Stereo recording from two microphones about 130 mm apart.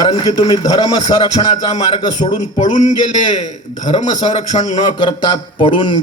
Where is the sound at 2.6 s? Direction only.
65° left (ahead or behind).